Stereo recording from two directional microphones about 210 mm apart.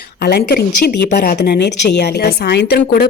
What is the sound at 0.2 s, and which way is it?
Speech, 50° left (ahead or behind).